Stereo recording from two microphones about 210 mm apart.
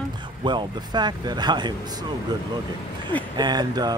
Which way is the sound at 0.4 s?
20° right (ahead or behind).